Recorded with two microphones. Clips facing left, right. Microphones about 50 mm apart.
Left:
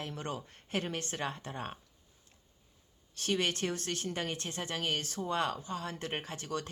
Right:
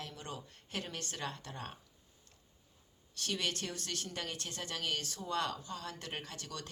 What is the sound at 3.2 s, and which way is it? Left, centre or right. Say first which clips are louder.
Speech: left 5 dB; left.